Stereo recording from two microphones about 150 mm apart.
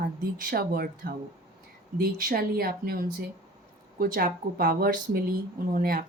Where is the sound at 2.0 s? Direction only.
75° right (ahead or behind).